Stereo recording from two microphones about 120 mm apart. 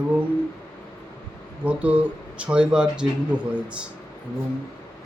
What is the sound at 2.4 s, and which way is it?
A man's voice, 10° right (ahead or behind).